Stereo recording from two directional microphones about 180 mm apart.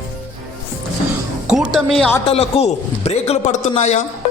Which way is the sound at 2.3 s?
35° left (ahead or behind).